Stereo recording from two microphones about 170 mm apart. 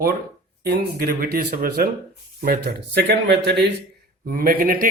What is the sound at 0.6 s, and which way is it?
Speech, 65° right (ahead or behind).